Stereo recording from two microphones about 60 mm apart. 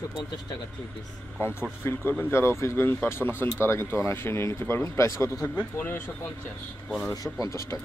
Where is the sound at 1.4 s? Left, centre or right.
Left.